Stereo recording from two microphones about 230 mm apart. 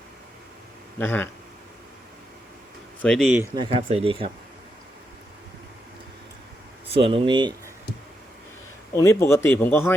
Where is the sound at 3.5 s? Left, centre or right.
Right.